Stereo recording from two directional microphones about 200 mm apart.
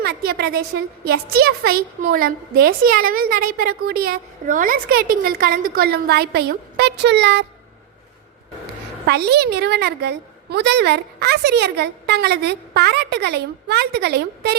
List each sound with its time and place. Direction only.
0.0 s a sound: 50° right (ahead or behind)
1.0 s a woman's voice: 50° right (ahead or behind)
9.0 s a woman's voice: 55° right (ahead or behind)